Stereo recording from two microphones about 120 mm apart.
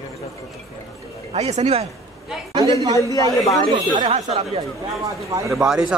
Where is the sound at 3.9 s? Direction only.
55° right (ahead or behind).